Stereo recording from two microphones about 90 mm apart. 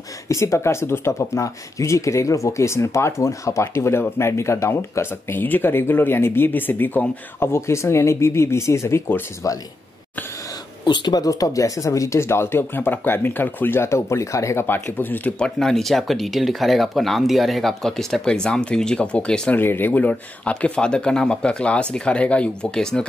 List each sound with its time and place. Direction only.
0.3 s speech: 35° left (ahead or behind)
10.9 s speech: 50° left (ahead or behind); by 15.3 s 20° left (ahead or behind)
15.3 s speech: 5° left (ahead or behind)
19.5 s speech: 20° left (ahead or behind)